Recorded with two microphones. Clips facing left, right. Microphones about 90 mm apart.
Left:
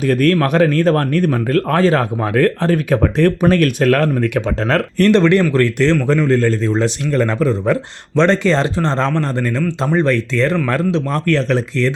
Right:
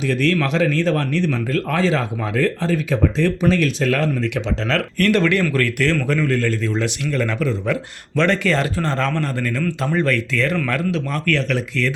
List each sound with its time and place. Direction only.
0.0 s a man's voice: 50° left (ahead or behind); by 11.9 s 30° left (ahead or behind)